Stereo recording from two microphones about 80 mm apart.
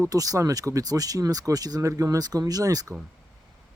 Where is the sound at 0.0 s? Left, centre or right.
Right.